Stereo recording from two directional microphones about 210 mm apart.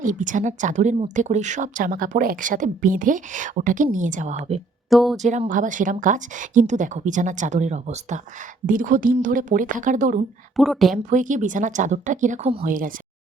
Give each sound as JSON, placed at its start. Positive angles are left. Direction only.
{"t": 0.0, "sound": "speech", "side_deg": -40}
{"t": 4.9, "sound": "speech", "side_deg": 0}
{"t": 5.2, "sound": "speech", "side_deg": -35}
{"t": 10.6, "sound": "speech", "side_deg": 0}
{"t": 10.9, "sound": "speech", "side_deg": -35}